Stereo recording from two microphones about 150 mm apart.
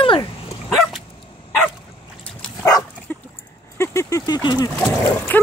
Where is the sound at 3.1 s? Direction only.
15° left (ahead or behind).